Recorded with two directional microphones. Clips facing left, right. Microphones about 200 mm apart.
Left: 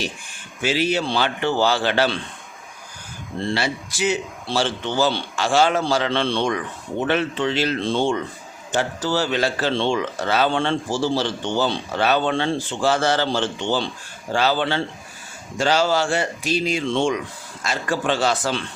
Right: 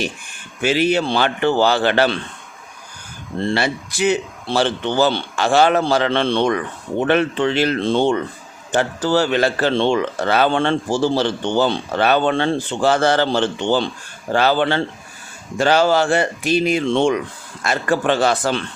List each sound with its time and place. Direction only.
0.6 s speech: 55° right (ahead or behind)
3.5 s speech: 55° right (ahead or behind)